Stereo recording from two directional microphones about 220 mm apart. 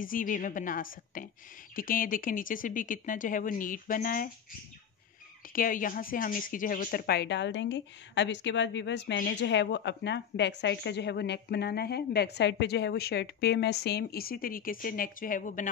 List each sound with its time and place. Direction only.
0.0 s speech: 40° left (ahead or behind)
5.5 s speech: 40° left (ahead or behind)